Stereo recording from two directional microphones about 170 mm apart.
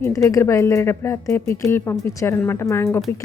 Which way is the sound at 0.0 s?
20° left (ahead or behind).